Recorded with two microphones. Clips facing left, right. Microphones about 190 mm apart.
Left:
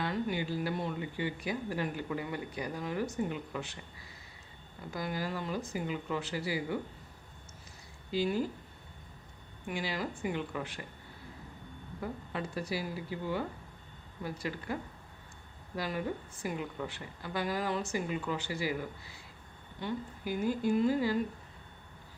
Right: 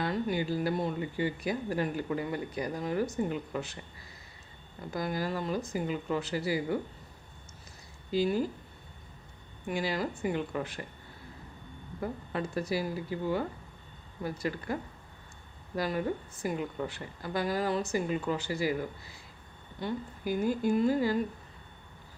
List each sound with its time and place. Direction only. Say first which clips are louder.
0.0 s speech: right 3 dB; 40° right (ahead or behind)
4.9 s speech: right 4 dB; 45° right (ahead or behind)
8.1 s speech: right 3 dB; 40° right (ahead or behind)
9.6 s speech: right 4 dB; 40° right (ahead or behind)
11.9 s speech: right 4 dB; 45° right (ahead or behind)
19.8 s speech: right 3 dB; 45° right (ahead or behind)